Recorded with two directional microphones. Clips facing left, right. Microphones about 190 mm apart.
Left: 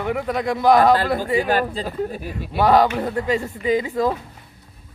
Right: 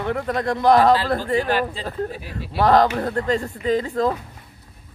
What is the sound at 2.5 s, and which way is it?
Speech, centre (ahead or behind).